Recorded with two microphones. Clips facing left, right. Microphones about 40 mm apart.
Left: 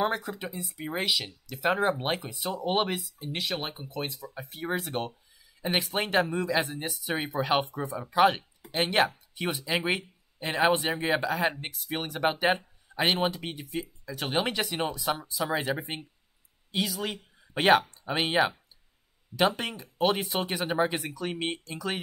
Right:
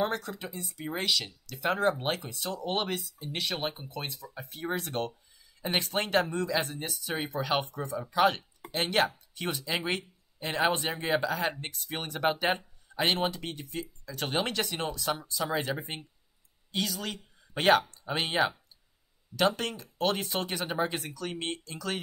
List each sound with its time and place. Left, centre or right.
0.0 s speech: centre